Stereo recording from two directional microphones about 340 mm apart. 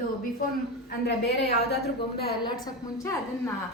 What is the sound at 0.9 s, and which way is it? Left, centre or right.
Speech, left.